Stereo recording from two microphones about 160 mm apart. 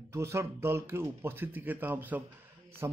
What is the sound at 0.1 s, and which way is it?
Speech, 15° right (ahead or behind).